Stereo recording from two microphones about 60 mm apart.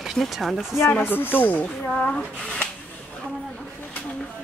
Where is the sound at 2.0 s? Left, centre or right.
Centre.